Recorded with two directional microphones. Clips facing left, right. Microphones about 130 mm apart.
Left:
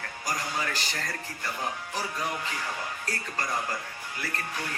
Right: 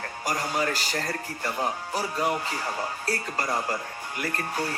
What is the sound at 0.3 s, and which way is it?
Speech, 40° right (ahead or behind).